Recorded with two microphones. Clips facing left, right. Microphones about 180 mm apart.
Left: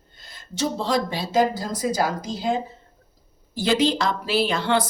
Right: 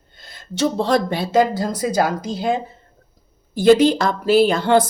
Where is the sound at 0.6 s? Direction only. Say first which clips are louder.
Right 5 dB; 60° right (ahead or behind).